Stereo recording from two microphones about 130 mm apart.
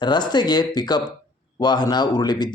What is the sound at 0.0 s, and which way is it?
A man's voice, 35° left (ahead or behind).